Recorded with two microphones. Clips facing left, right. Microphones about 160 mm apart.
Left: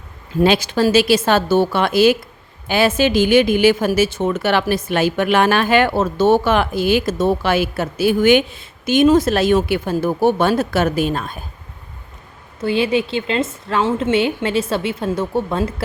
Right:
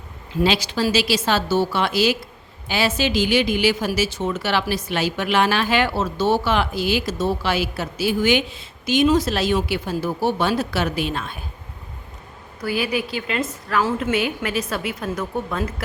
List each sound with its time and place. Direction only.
0.4 s a woman's voice: 50° left (ahead or behind)
12.5 s a woman's voice: 25° left (ahead or behind)